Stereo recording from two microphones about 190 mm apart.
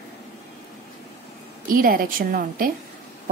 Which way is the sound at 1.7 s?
50° right (ahead or behind).